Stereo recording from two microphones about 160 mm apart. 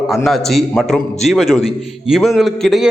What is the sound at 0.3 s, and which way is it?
A man's voice, centre (ahead or behind).